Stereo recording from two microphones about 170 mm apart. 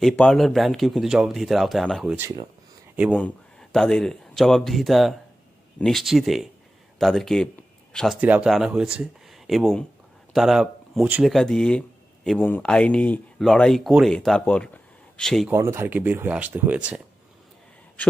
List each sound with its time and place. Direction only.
0.0 s speech: 5° left (ahead or behind)
3.2 s speech: 5° left (ahead or behind)
8.2 s speech: 10° right (ahead or behind)
15.5 s speech: 15° right (ahead or behind)